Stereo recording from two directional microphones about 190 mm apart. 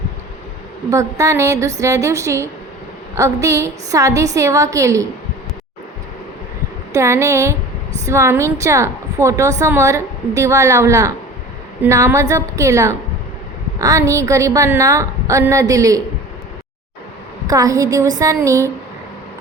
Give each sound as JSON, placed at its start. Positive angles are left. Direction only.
{"t": 0.9, "sound": "a woman's voice", "side_deg": -15}
{"t": 6.9, "sound": "a woman's voice", "side_deg": -15}
{"t": 17.4, "sound": "a woman's voice", "side_deg": -20}